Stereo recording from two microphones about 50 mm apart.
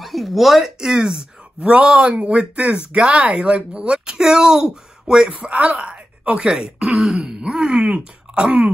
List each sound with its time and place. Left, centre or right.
0.0 s speech: centre
5.5 s speech: right